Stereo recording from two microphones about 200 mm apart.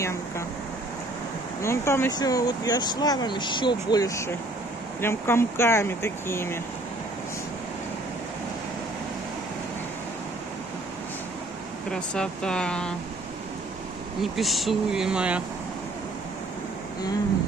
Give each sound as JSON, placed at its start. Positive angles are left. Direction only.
{"t": 1.6, "sound": "speech", "side_deg": 15}
{"t": 11.9, "sound": "speech", "side_deg": 5}
{"t": 14.2, "sound": "speech", "side_deg": 0}